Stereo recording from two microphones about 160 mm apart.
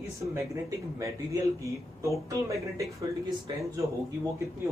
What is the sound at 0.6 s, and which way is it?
Speech, 20° right (ahead or behind).